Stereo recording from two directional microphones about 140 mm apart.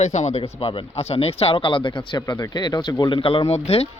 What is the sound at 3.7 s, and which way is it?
Speech, 50° left (ahead or behind).